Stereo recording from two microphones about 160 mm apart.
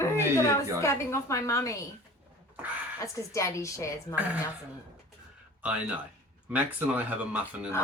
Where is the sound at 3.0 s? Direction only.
20° left (ahead or behind).